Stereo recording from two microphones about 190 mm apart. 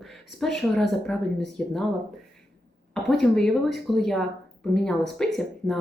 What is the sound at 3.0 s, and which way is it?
Speech, centre (ahead or behind).